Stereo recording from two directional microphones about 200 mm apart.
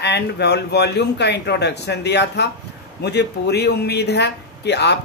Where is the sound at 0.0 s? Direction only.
55° left (ahead or behind).